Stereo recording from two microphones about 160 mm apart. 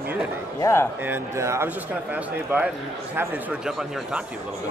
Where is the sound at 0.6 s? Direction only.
15° left (ahead or behind).